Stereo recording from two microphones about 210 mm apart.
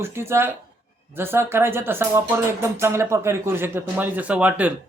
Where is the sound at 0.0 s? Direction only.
10° right (ahead or behind).